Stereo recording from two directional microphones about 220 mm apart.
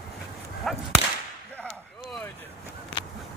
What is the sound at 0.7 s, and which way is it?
Whip, centre (ahead or behind).